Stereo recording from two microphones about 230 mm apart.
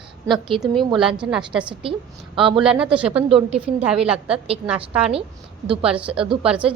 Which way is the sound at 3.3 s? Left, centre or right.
Right.